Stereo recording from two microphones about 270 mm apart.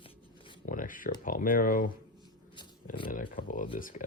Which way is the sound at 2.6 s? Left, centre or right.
Centre.